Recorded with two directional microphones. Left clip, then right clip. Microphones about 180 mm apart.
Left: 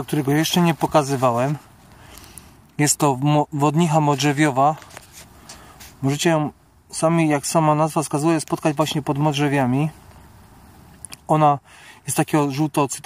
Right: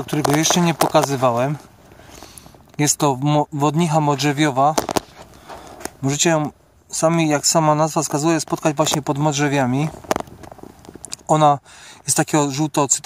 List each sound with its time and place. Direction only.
0.1 s speech: centre (ahead or behind)
2.7 s speech: centre (ahead or behind)
6.0 s speech: centre (ahead or behind)
11.1 s a sound: centre (ahead or behind)
12.1 s speech: centre (ahead or behind)